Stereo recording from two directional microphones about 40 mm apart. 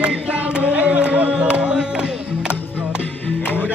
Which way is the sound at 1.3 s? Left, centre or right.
Right.